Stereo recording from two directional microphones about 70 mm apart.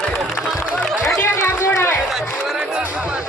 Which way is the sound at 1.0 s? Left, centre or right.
Left.